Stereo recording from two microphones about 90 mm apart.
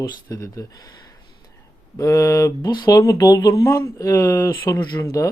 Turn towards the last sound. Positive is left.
turn(degrees=30)  # may be behind; listen again after turning